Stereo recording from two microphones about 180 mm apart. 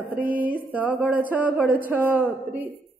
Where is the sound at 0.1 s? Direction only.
50° right (ahead or behind).